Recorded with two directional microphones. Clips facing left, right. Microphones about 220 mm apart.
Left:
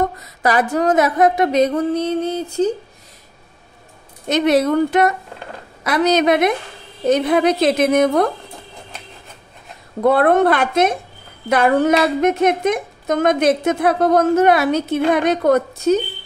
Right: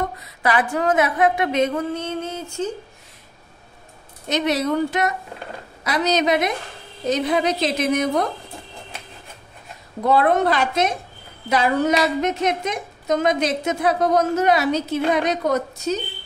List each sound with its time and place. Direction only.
0.0 s a sound: 40° left (ahead or behind)
4.3 s a woman's voice: 55° left (ahead or behind)
10.0 s a woman's voice: 55° left (ahead or behind)